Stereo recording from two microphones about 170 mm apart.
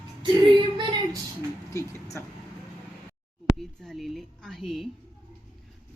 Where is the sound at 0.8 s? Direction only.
30° right (ahead or behind).